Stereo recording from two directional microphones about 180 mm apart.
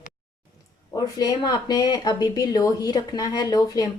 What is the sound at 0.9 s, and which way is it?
Speech, 20° left (ahead or behind).